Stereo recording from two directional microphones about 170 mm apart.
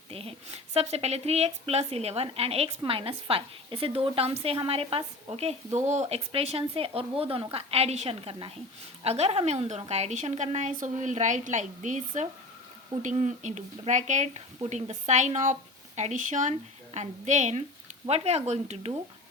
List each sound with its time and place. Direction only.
0.1 s speech: 35° right (ahead or behind)